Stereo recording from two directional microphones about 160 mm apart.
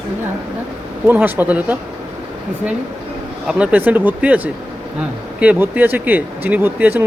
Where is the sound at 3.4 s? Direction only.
5° right (ahead or behind).